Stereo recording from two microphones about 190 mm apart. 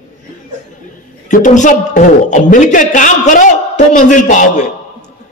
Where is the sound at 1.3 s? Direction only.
40° left (ahead or behind).